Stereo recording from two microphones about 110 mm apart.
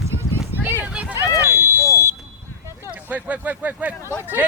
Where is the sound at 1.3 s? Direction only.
25° left (ahead or behind).